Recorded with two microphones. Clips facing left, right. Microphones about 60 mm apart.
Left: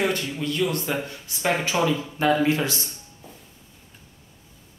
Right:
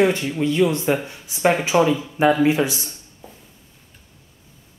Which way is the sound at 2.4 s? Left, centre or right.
Centre.